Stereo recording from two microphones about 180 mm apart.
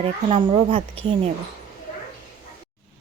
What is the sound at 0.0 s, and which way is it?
Speech, 30° right (ahead or behind).